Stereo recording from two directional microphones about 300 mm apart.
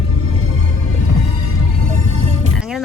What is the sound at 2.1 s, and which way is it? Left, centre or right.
Music, right.